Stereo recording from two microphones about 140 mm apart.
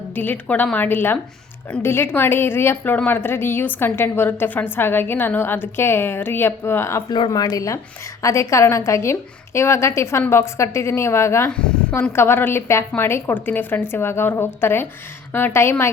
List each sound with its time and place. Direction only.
0.2 s a woman's voice: 15° left (ahead or behind)
7.1 s a woman's voice: 30° left (ahead or behind)
11.5 s a woman's voice: 10° left (ahead or behind)